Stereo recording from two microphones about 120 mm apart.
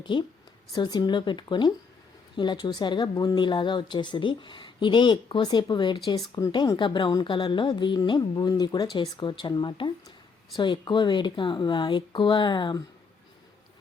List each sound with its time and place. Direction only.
0.0 s speech: 40° left (ahead or behind)